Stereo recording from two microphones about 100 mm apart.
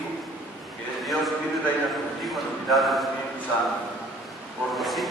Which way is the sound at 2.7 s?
Centre (ahead or behind).